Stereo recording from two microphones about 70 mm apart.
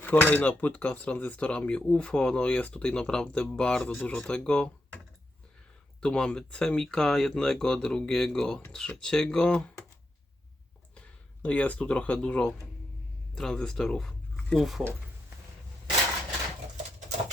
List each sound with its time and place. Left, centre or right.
0.0 s speech: left
6.0 s speech: centre
10.9 s speech: centre
14.6 s speech: centre